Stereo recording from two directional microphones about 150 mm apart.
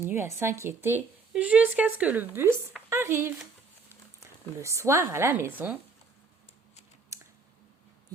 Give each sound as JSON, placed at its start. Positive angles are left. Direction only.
{"t": 0.0, "sound": "speech", "side_deg": -15}